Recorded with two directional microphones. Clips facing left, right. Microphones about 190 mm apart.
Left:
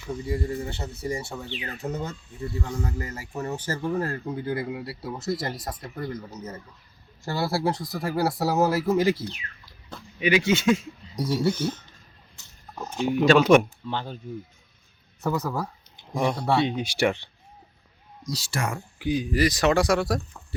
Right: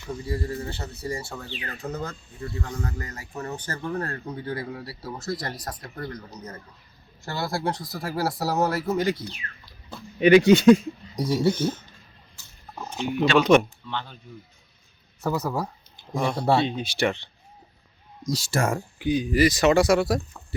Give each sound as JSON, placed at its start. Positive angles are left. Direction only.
{"t": 0.4, "sound": "speech", "side_deg": 20}
{"t": 2.6, "sound": "speech", "side_deg": 5}
{"t": 7.3, "sound": "speech", "side_deg": 10}
{"t": 10.2, "sound": "speech", "side_deg": -50}
{"t": 11.3, "sound": "speech", "side_deg": -25}
{"t": 12.9, "sound": "speech", "side_deg": 10}
{"t": 13.8, "sound": "speech", "side_deg": 40}
{"t": 15.2, "sound": "speech", "side_deg": 0}
{"t": 15.4, "sound": "speech", "side_deg": -10}
{"t": 16.0, "sound": "a sound", "side_deg": 20}
{"t": 16.3, "sound": "speech", "side_deg": -25}
{"t": 16.6, "sound": "speech", "side_deg": 15}
{"t": 18.3, "sound": "speech", "side_deg": -45}
{"t": 18.9, "sound": "speech", "side_deg": 0}